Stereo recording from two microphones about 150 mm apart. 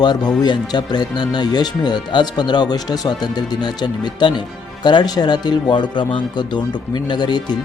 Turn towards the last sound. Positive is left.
turn(degrees=30)  # may be behind; listen again after turning